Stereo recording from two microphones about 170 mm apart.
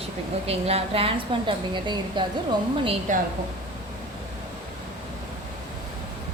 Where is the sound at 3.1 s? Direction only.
50° right (ahead or behind).